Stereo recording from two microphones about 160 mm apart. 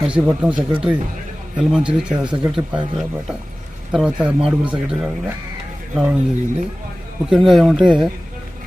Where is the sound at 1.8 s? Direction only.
30° right (ahead or behind).